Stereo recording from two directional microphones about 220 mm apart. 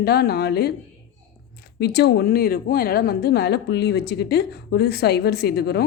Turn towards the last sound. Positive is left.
turn(degrees=45)  # may be behind; listen again after turning